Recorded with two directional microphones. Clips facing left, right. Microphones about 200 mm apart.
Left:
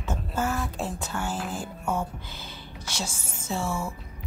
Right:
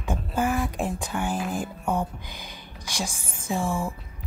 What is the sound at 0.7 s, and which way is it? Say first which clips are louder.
A woman's voice: right 3 dB; 15° right (ahead or behind).